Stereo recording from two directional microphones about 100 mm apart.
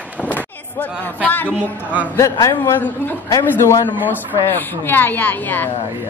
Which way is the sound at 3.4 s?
30° left (ahead or behind).